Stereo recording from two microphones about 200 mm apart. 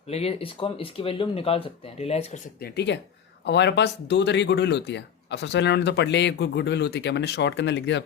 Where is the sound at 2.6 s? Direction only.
55° left (ahead or behind).